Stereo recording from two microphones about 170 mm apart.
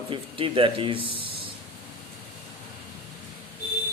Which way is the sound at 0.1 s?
30° right (ahead or behind).